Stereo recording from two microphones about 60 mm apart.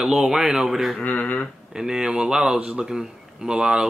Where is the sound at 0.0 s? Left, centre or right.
Centre.